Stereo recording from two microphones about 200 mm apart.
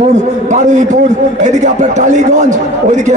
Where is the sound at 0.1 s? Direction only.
35° right (ahead or behind).